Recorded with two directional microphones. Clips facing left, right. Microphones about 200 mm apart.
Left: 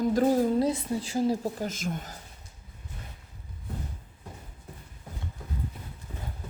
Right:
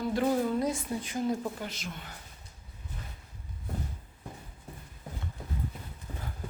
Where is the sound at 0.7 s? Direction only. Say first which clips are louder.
Left 4 dB; 25° left (ahead or behind); by 2.1 s 45° left (ahead or behind).